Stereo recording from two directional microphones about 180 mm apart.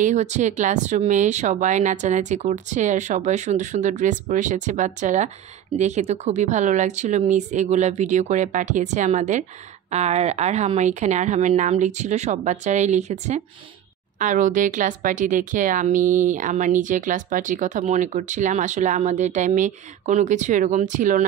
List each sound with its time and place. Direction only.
0.0 s speech: 40° right (ahead or behind)